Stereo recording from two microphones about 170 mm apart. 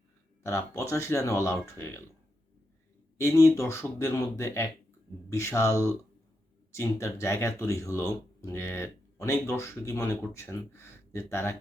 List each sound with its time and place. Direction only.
0.4 s speech: 15° left (ahead or behind)
3.2 s speech: 15° left (ahead or behind)